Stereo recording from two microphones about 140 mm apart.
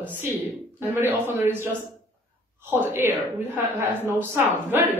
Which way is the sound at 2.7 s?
15° right (ahead or behind).